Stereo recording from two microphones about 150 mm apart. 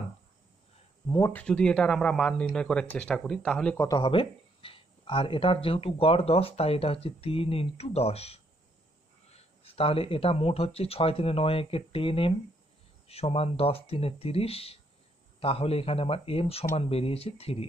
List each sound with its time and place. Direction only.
1.0 s speech: 25° left (ahead or behind)
1.3 s speech: 5° left (ahead or behind)
3.7 s speech: 25° left (ahead or behind); by 17.6 s 40° left (ahead or behind)